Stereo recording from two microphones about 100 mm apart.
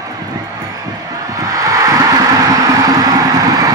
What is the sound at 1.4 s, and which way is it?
Music, 35° right (ahead or behind).